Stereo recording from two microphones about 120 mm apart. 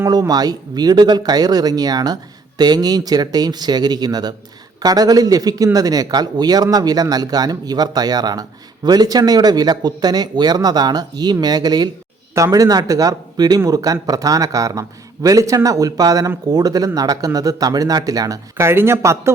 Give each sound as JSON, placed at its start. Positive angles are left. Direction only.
{"t": 0.1, "sound": "a man's voice", "side_deg": -35}
{"t": 18.5, "sound": "a man's voice", "side_deg": -20}